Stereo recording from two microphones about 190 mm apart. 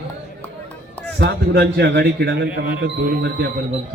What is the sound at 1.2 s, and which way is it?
A man's voice, 60° right (ahead or behind).